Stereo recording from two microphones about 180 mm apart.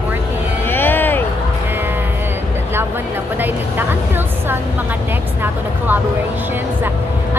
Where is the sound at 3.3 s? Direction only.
10° right (ahead or behind).